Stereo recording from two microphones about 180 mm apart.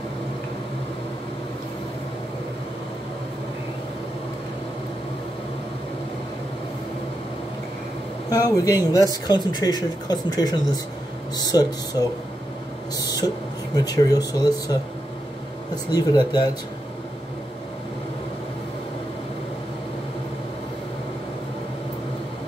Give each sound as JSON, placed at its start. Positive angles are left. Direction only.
{"t": 8.3, "sound": "speech", "side_deg": 20}